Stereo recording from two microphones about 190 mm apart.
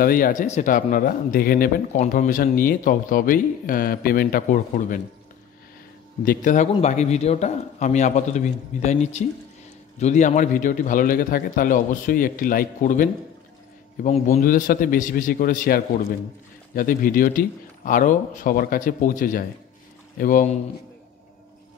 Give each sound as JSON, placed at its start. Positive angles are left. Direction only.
{"t": 0.0, "sound": "a man's voice", "side_deg": 50}
{"t": 6.2, "sound": "a man's voice", "side_deg": 45}